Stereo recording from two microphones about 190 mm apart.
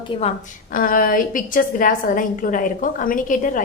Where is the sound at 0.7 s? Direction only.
50° left (ahead or behind).